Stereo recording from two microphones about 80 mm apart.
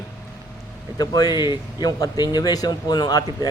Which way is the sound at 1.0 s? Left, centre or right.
Left.